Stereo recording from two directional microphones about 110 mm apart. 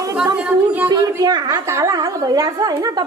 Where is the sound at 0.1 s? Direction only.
15° right (ahead or behind).